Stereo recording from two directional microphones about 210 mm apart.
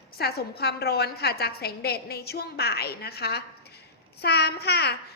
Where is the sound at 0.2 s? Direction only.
50° left (ahead or behind).